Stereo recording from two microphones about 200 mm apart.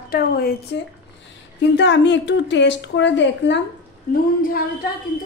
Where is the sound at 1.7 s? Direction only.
60° left (ahead or behind).